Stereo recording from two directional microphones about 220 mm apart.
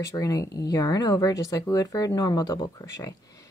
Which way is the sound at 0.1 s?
15° left (ahead or behind).